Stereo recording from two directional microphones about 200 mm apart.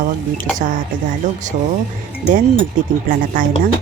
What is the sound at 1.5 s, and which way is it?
Speech, 35° right (ahead or behind).